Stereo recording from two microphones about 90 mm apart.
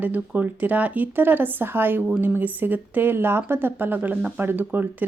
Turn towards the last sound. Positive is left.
turn(degrees=-20)  # may be behind; listen again after turning